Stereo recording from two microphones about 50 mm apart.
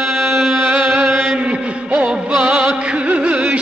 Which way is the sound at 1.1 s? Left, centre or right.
Centre.